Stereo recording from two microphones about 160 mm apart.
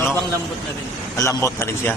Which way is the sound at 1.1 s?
20° left (ahead or behind).